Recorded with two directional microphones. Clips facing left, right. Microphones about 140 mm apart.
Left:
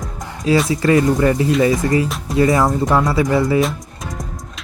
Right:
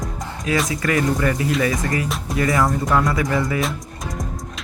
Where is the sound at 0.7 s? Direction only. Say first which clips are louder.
Left 6 dB; 25° left (ahead or behind).